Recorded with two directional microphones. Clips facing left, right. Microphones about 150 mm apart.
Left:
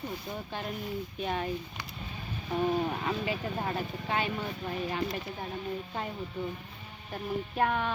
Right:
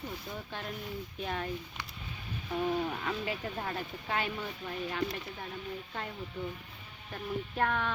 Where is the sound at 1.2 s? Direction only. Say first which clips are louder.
Left 3 dB; 5° left (ahead or behind).